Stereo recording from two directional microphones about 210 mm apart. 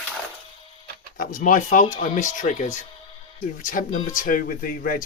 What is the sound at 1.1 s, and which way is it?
Speech, 40° left (ahead or behind).